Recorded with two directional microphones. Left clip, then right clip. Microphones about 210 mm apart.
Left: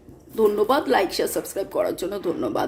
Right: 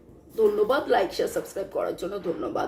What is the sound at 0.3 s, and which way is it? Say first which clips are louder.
A woman's voice: left 3 dB; 40° left (ahead or behind).